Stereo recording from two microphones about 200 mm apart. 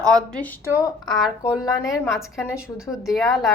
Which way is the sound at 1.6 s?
15° left (ahead or behind).